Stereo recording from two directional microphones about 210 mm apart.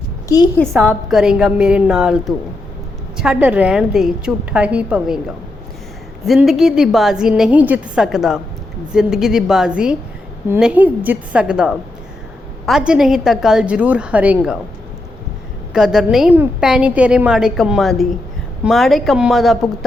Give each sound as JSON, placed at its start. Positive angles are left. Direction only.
{"t": 0.3, "sound": "a woman's voice", "side_deg": 20}
{"t": 0.6, "sound": "a woman's voice", "side_deg": 0}
{"t": 6.2, "sound": "a woman's voice", "side_deg": 0}
{"t": 15.7, "sound": "a woman's voice", "side_deg": 0}